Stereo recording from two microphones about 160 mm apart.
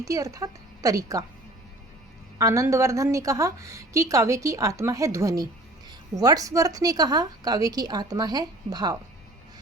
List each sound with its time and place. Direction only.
0.0 s a woman's voice: 20° right (ahead or behind)
2.4 s a woman's voice: 20° right (ahead or behind)